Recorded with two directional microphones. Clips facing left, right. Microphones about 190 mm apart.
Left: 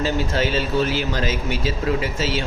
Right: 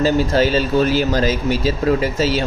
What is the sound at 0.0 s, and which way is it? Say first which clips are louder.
Speech: right 6 dB; 40° right (ahead or behind).